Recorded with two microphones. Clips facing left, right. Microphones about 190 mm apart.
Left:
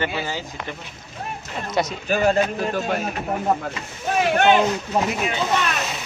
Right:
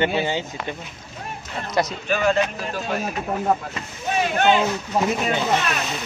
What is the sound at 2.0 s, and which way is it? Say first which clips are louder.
Speech: left 2 dB; 40° left (ahead or behind).